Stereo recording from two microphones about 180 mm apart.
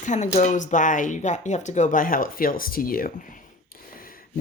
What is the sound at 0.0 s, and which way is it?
Speech, 40° left (ahead or behind).